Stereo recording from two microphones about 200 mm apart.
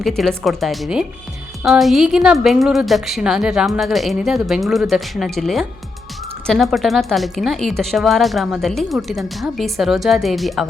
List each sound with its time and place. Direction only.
0.2 s speech: centre (ahead or behind)